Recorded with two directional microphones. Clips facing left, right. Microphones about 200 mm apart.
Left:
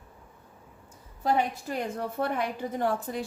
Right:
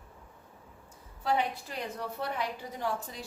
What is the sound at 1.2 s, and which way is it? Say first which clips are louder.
A woman's voice: left 4 dB; 45° left (ahead or behind).